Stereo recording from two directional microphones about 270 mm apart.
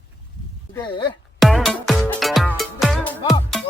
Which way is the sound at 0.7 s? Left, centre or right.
Centre.